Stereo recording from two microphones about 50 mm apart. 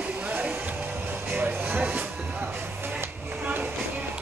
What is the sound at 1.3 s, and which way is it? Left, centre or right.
Music, right.